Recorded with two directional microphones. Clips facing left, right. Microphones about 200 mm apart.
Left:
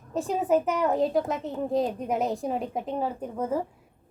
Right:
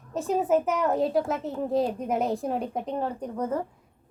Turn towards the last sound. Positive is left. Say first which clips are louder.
# even
turn(degrees=5)  # may be behind; listen again after turning